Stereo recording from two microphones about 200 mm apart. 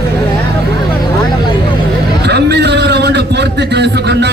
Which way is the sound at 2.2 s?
55° right (ahead or behind).